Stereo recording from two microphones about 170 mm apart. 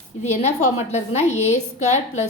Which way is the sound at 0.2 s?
40° left (ahead or behind).